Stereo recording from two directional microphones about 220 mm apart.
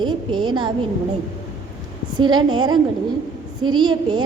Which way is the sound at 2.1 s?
20° right (ahead or behind).